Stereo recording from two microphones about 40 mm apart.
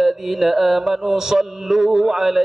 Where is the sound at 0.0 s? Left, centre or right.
Centre.